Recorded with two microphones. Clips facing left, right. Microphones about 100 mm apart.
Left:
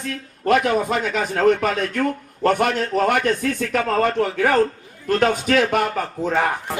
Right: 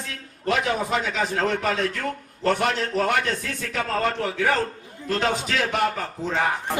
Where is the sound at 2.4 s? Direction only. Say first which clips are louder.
Left 4 dB; 50° left (ahead or behind).